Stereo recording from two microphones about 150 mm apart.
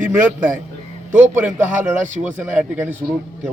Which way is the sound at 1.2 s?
10° right (ahead or behind).